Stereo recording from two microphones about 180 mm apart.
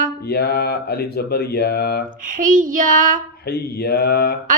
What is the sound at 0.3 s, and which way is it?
Mantra, 60° left (ahead or behind).